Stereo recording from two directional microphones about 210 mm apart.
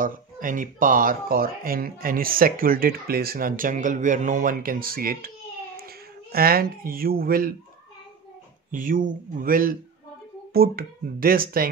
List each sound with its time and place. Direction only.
0.0 s speech: 40° right (ahead or behind)
6.3 s speech: 45° right (ahead or behind)
8.7 s speech: 40° right (ahead or behind)